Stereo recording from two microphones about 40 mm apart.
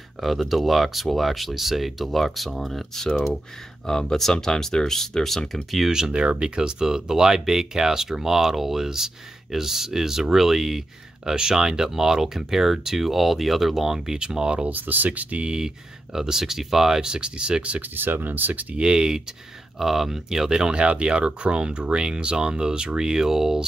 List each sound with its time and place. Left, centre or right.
0.2 s speech: centre
3.0 s speech: centre
5.5 s speech: centre
5.9 s speech: centre
14.1 s speech: right
14.7 s speech: right
15.4 s speech: centre
17.9 s speech: right
18.8 s speech: centre